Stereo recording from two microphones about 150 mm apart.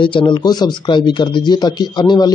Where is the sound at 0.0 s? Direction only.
35° left (ahead or behind).